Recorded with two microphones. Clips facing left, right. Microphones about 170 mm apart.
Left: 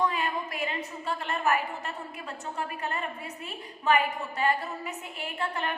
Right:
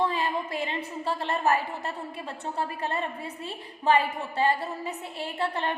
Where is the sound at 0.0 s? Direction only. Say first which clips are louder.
Right 2 dB; 30° right (ahead or behind).